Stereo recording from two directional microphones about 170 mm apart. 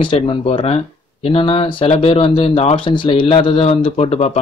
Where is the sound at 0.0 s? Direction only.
30° left (ahead or behind).